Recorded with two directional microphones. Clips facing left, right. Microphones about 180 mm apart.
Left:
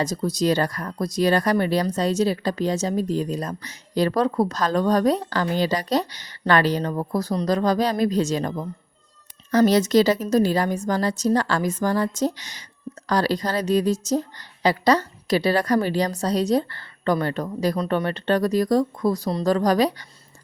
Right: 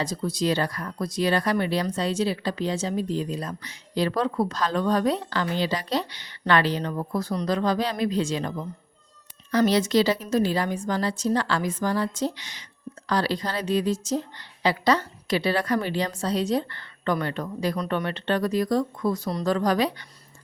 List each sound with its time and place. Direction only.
0.0 s a woman's voice: 40° left (ahead or behind)